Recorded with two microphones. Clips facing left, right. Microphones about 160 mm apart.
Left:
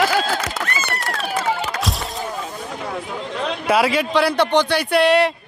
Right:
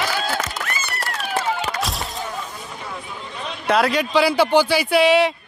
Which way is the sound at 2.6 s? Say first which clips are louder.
Left 6 dB; 60° left (ahead or behind).